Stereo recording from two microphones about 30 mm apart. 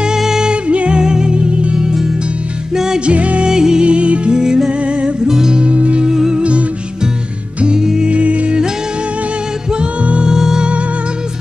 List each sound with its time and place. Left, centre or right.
0.7 s music: right
1.0 s music: right
2.7 s music: centre
3.1 s music: right
3.4 s music: right
3.8 s music: right
4.3 s music: right
4.6 s music: right
5.2 s music: centre
5.5 s music: right
7.8 s music: centre
8.1 s music: right
10.2 s music: centre